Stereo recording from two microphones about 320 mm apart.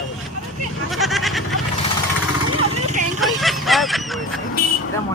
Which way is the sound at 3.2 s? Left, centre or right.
Centre.